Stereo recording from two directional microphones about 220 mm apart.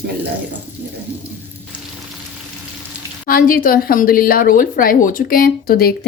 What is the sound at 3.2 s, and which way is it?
A woman's voice, 40° left (ahead or behind).